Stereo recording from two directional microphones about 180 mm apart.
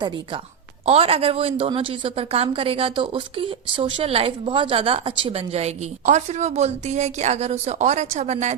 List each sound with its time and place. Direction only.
0.9 s a woman's voice: 35° right (ahead or behind)